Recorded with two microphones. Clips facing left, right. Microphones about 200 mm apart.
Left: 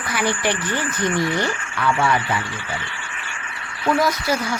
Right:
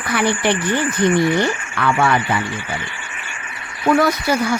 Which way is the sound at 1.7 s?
65° right (ahead or behind).